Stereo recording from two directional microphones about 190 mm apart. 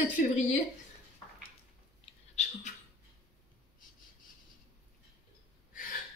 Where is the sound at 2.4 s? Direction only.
35° left (ahead or behind).